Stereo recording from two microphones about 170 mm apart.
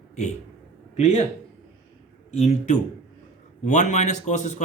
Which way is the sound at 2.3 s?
40° left (ahead or behind).